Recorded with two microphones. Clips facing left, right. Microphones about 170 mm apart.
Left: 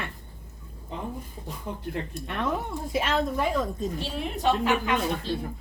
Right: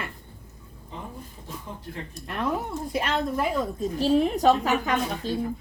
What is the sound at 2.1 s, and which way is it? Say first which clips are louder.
Speech: right 3 dB; centre (ahead or behind).